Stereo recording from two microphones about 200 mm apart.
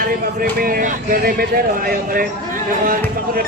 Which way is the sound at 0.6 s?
45° right (ahead or behind).